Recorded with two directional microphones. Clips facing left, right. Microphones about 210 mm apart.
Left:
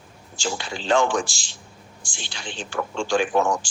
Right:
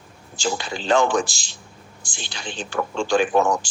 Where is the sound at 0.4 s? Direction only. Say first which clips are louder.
Right 2 dB; 40° right (ahead or behind).